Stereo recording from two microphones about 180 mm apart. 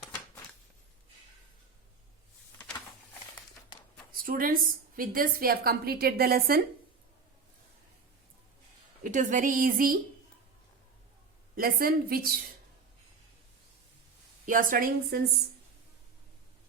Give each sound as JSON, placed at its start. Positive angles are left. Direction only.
{"t": 2.6, "sound": "a sound", "side_deg": 10}
{"t": 4.1, "sound": "a woman's voice", "side_deg": -55}
{"t": 9.1, "sound": "a woman's voice", "side_deg": -45}
{"t": 11.5, "sound": "a woman's voice", "side_deg": -55}
{"t": 14.4, "sound": "a woman's voice", "side_deg": -50}